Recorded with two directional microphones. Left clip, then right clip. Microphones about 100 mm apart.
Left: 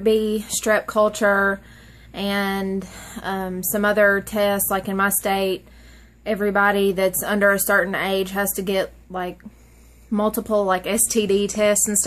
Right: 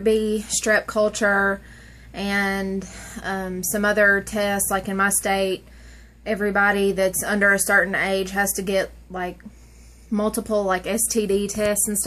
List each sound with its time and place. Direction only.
0.0 s a woman's voice: 25° left (ahead or behind)